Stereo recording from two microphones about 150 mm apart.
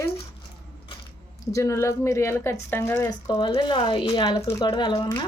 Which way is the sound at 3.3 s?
30° left (ahead or behind).